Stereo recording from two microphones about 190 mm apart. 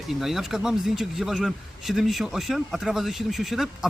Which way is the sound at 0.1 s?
Centre (ahead or behind).